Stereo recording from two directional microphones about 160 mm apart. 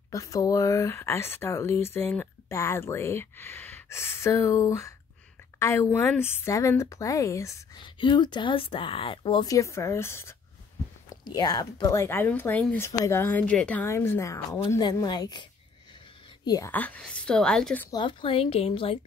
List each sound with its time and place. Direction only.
0.1 s speech: 20° left (ahead or behind)
16.3 s a sound: 25° left (ahead or behind)
16.7 s speech: 10° left (ahead or behind)
17.9 s a woman's voice: 30° left (ahead or behind)